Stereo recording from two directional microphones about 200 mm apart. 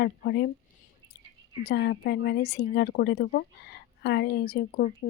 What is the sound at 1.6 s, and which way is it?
Speech, 55° left (ahead or behind).